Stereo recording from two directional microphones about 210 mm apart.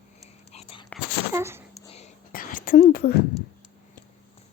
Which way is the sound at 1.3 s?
10° right (ahead or behind).